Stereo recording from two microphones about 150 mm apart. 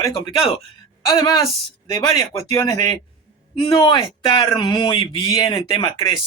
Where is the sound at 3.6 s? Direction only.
35° left (ahead or behind).